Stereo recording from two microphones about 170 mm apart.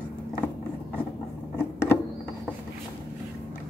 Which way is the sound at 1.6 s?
15° left (ahead or behind).